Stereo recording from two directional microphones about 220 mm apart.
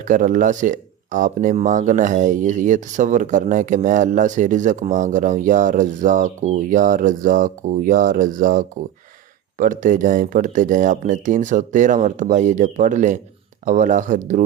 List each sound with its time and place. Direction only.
0.0 s speech: 35° right (ahead or behind)